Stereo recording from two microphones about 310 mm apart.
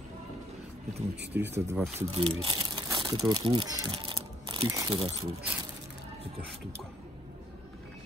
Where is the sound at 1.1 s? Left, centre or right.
Right.